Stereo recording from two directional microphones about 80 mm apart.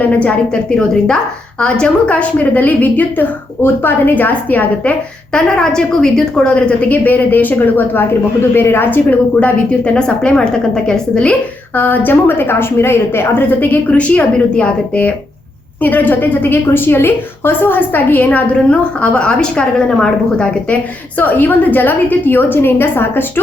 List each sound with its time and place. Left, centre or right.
0.0 s a woman's voice: centre
11.8 s a woman's voice: left
21.2 s a woman's voice: left